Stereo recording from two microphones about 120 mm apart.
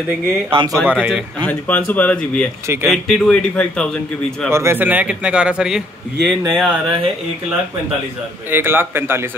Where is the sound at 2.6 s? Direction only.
20° right (ahead or behind).